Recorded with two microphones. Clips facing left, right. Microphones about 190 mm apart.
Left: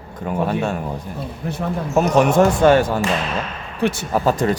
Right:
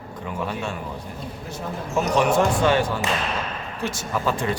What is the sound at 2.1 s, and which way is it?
Speech, 45° left (ahead or behind).